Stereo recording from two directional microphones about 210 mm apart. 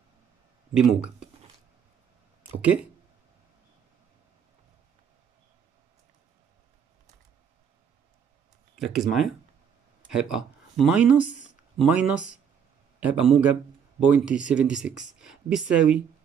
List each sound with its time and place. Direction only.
0.7 s speech: 5° right (ahead or behind)
2.6 s speech: 5° right (ahead or behind)
8.7 s speech: centre (ahead or behind)